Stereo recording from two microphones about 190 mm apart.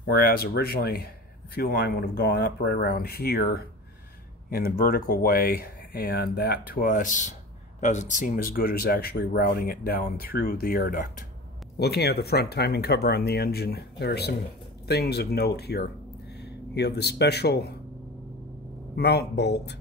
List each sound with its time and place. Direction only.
0.0 s speech: 55° left (ahead or behind)
18.9 s speech: 60° left (ahead or behind)